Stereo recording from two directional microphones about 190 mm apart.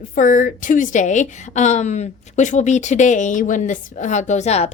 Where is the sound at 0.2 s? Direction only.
45° left (ahead or behind).